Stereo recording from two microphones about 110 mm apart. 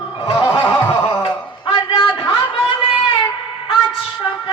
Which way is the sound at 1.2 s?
40° left (ahead or behind).